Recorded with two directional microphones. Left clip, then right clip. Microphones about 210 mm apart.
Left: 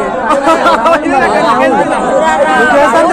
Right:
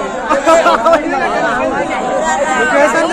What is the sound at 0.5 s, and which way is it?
Chatter, 45° left (ahead or behind).